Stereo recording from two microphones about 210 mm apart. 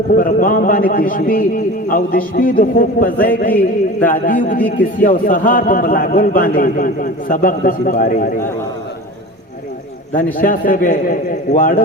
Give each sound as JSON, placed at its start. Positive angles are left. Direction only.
{"t": 0.1, "sound": "a man's voice", "side_deg": 40}
{"t": 10.3, "sound": "a man's voice", "side_deg": 40}